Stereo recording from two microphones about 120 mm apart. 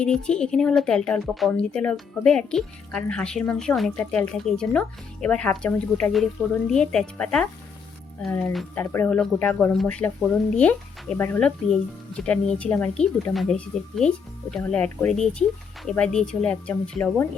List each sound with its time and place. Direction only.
0.0 s a woman's voice: 10° left (ahead or behind)